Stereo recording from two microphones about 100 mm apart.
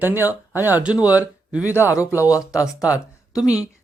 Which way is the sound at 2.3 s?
30° left (ahead or behind).